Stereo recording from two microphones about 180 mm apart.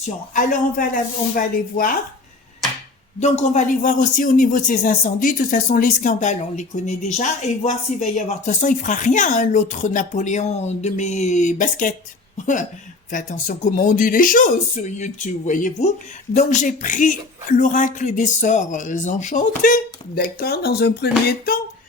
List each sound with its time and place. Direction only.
0.0 s speech: 45° left (ahead or behind)
3.2 s speech: 40° left (ahead or behind); by 21.6 s 55° left (ahead or behind)